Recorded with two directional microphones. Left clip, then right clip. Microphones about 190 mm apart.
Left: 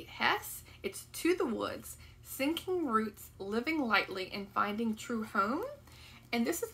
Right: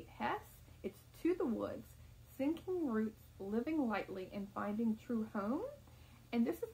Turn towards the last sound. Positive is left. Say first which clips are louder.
# left 5 dB
turn(degrees=5)  # may be behind; listen again after turning